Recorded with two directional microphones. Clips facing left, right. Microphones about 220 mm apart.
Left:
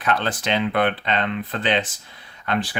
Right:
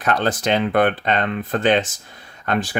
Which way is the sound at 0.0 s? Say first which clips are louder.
Right 3 dB; 40° right (ahead or behind).